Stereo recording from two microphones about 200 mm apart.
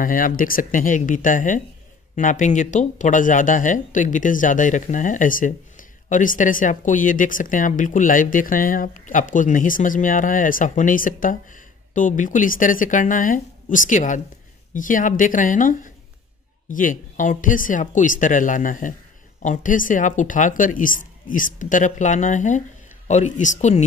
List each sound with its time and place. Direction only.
0.0 s speech: 45° left (ahead or behind)